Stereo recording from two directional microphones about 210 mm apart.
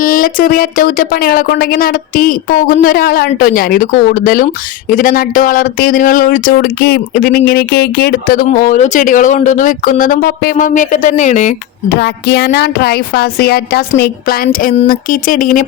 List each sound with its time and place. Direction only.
0.0 s speech: 40° left (ahead or behind)
11.9 s speech: 50° left (ahead or behind)